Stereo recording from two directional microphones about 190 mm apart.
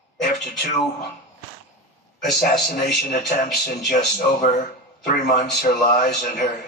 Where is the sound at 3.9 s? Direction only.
45° left (ahead or behind).